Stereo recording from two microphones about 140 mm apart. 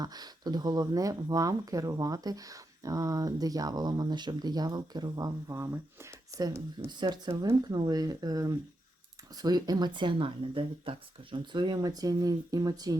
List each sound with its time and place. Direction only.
0.0 s speech: 30° right (ahead or behind)